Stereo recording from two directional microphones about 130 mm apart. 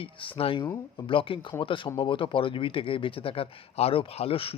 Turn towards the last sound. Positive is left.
turn(degrees=45)  # may be behind; listen again after turning